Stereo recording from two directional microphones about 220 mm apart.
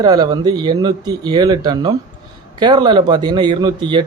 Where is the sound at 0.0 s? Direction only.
20° right (ahead or behind).